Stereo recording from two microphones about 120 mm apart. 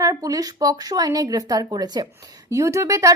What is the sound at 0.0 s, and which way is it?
Speech, 30° right (ahead or behind).